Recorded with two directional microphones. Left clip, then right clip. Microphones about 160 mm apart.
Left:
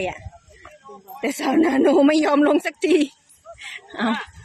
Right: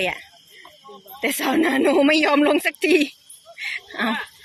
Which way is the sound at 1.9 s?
25° left (ahead or behind).